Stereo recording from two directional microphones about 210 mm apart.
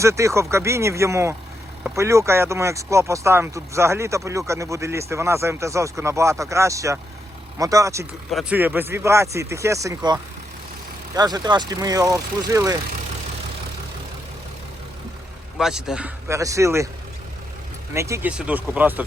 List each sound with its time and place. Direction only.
0.0 s speech: 15° right (ahead or behind)
8.3 s speech: 5° right (ahead or behind)
15.5 s speech: centre (ahead or behind)
17.9 s speech: 15° right (ahead or behind)